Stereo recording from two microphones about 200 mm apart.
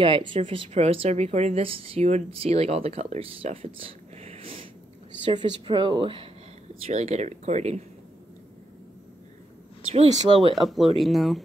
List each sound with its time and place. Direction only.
0.3 s speech: 25° right (ahead or behind)
6.7 s speech: 35° right (ahead or behind)
9.9 s speech: 30° right (ahead or behind)
10.5 s speech: centre (ahead or behind)